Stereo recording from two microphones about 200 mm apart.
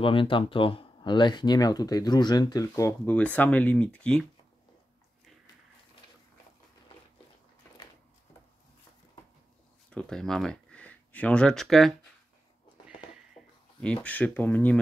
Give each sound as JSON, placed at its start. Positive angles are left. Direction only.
{"t": 0.0, "sound": "speech", "side_deg": 25}
{"t": 9.8, "sound": "speech", "side_deg": 5}
{"t": 12.8, "sound": "a sound", "side_deg": 0}